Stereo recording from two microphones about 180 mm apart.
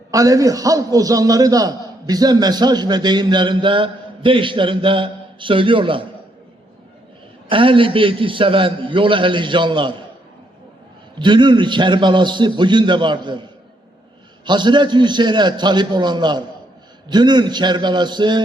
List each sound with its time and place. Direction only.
0.1 s a man's voice: 20° right (ahead or behind)
7.5 s a man's voice: 30° right (ahead or behind)
11.2 s a man's voice: 25° right (ahead or behind)
14.4 s a man's voice: 25° right (ahead or behind)